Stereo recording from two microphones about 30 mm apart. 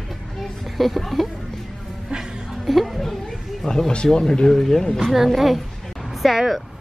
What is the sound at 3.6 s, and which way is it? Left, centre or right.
Speech, centre.